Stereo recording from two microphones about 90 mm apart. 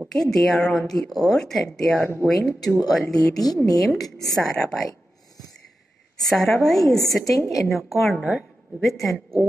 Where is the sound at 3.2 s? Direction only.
45° left (ahead or behind).